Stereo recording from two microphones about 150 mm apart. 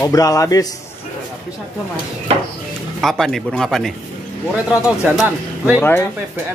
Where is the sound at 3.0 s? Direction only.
Centre (ahead or behind).